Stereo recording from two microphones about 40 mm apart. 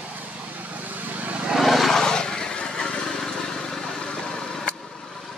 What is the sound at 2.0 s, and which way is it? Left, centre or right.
Vehicle, centre.